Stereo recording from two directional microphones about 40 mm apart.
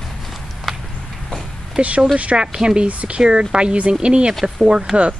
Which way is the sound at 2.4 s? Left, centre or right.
Centre.